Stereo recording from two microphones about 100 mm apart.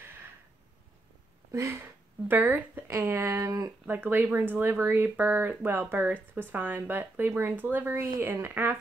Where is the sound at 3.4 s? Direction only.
30° right (ahead or behind).